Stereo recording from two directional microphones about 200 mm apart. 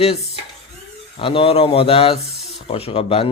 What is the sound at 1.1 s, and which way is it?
Speech, 25° left (ahead or behind).